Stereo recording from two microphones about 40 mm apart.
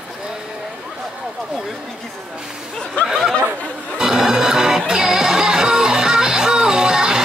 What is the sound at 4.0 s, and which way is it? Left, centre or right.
Music, centre.